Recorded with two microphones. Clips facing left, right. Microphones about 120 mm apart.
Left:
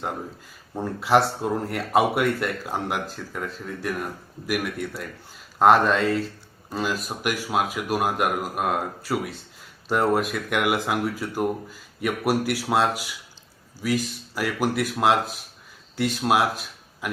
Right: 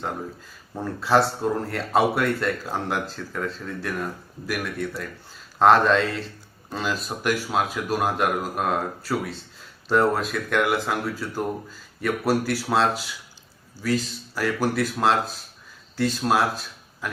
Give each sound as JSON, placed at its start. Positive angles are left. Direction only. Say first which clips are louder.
{"t": 0.8, "sound": "speech", "louder": "even", "side_deg": 15}